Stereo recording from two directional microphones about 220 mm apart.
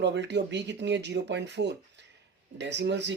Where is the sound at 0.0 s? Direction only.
55° right (ahead or behind).